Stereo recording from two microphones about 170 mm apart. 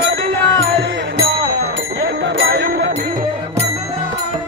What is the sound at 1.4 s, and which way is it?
Music, 80° right.